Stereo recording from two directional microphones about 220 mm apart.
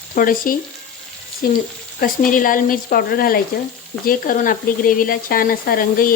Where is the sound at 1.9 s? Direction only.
40° left (ahead or behind).